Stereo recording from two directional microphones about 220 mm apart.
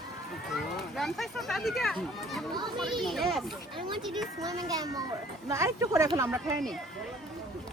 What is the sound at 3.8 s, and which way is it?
Speech, 20° right (ahead or behind).